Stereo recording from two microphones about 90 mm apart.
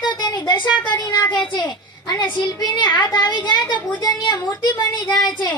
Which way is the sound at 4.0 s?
50° left (ahead or behind).